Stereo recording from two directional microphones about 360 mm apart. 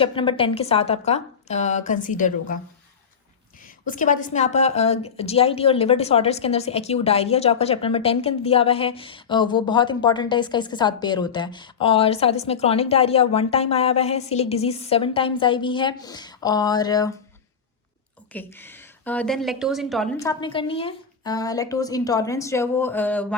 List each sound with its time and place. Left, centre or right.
0.0 s a woman's voice: centre
3.8 s a woman's voice: left
18.3 s a woman's voice: centre